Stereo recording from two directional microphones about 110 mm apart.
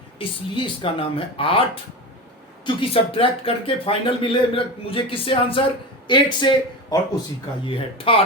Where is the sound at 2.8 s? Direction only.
55° left (ahead or behind).